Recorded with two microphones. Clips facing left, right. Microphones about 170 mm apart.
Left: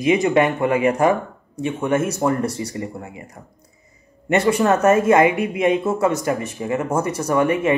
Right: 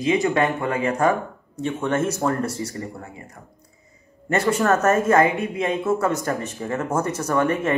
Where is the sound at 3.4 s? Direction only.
30° left (ahead or behind).